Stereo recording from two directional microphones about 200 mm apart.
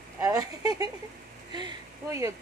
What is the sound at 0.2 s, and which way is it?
Speech, 15° right (ahead or behind).